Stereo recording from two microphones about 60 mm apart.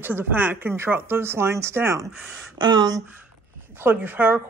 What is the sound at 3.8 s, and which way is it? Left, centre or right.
Speech, right.